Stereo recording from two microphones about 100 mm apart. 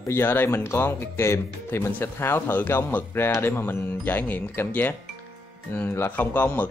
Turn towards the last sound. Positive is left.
turn(degrees=15)  # may be behind; listen again after turning